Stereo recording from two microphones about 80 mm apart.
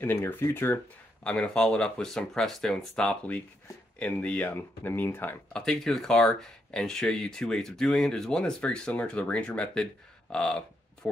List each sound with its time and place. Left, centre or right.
0.0 s speech: left
1.2 s speech: centre
5.5 s speech: centre
10.3 s a sound: centre